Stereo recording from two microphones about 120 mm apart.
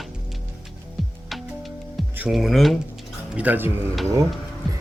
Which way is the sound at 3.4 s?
15° right (ahead or behind).